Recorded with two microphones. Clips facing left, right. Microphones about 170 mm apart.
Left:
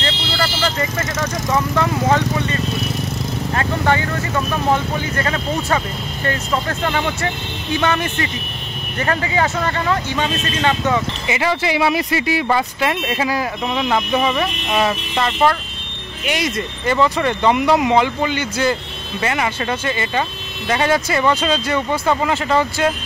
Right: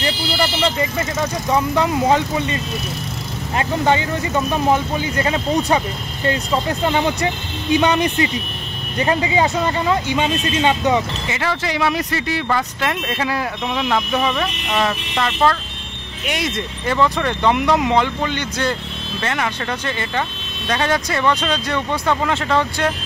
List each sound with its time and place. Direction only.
0.3 s speech: 25° right (ahead or behind)
3.5 s speech: 20° right (ahead or behind)
11.2 s speech: 10° left (ahead or behind)